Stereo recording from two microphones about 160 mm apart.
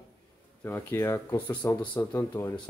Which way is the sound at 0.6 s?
15° left (ahead or behind).